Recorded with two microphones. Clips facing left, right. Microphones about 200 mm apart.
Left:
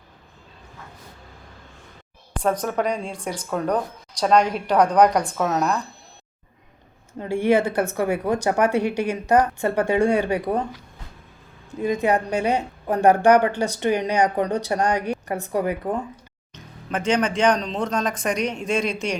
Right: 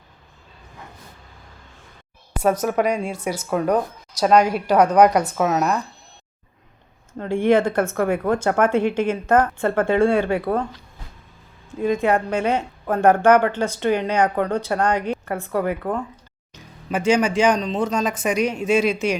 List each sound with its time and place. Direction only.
2.3 s speech: 5° right (ahead or behind)
7.2 s a woman's voice: 10° left (ahead or behind)
11.8 s a woman's voice: 15° left (ahead or behind)
16.9 s speech: 10° right (ahead or behind)